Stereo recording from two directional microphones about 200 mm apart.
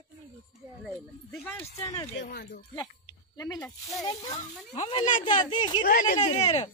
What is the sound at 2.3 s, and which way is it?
Speech, 50° left (ahead or behind).